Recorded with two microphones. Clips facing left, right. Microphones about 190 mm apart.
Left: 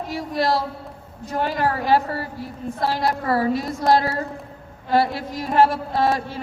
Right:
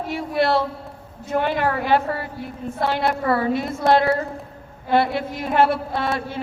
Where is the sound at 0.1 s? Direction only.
35° left (ahead or behind).